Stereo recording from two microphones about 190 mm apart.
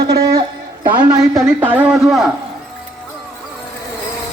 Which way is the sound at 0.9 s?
15° right (ahead or behind).